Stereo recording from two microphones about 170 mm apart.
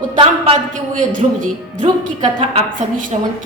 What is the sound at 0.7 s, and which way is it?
Music, 50° right (ahead or behind).